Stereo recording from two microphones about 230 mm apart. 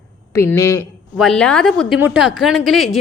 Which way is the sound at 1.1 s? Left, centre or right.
Centre.